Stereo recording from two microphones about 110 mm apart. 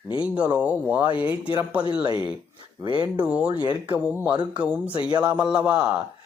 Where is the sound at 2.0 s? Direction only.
40° right (ahead or behind).